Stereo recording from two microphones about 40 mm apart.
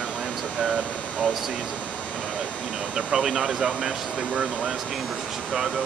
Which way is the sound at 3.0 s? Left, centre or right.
Centre.